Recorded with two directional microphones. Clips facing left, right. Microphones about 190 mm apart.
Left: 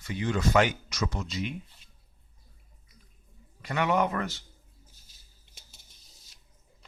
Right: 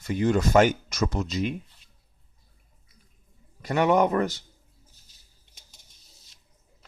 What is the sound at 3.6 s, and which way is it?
Speech, 40° right (ahead or behind).